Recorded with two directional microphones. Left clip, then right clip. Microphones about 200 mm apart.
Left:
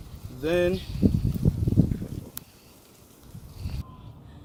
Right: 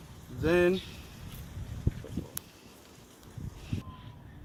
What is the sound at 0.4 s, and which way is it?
Speech, 45° right (ahead or behind).